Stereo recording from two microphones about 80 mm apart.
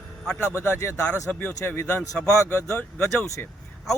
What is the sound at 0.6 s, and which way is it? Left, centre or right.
Speech, left.